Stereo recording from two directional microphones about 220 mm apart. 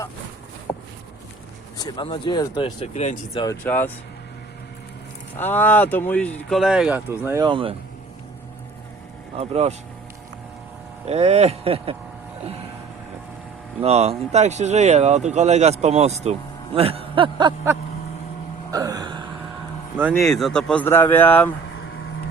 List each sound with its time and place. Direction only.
0.7 s a sound: 10° left (ahead or behind)
1.8 s speech: 20° left (ahead or behind)
3.4 s speech: 10° left (ahead or behind)
5.4 s speech: 10° left (ahead or behind); by 7.8 s 25° right (ahead or behind)
9.3 s speech: 25° right (ahead or behind)
11.0 s speech: 30° right (ahead or behind)
13.8 s speech: 30° right (ahead or behind)
18.7 s a sound: 15° right (ahead or behind)
20.0 s speech: 5° right (ahead or behind)